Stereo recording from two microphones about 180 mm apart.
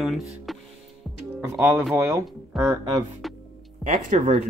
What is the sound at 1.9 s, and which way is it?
Speech, 15° right (ahead or behind).